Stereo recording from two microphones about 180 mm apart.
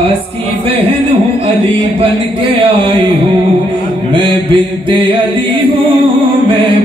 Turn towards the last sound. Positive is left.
turn(degrees=-30)  # may be behind; listen again after turning